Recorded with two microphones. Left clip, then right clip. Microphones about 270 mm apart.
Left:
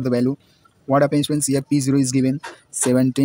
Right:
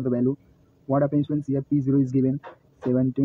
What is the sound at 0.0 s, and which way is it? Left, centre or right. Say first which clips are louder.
Speech: left 4 dB; left.